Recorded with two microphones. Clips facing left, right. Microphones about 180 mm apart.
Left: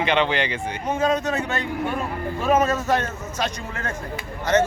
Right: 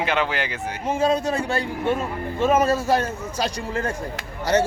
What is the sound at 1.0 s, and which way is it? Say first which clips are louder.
Speech: right 1 dB; 30° right (ahead or behind).